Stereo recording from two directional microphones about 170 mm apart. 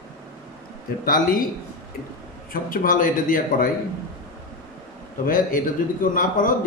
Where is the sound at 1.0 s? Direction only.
60° left (ahead or behind).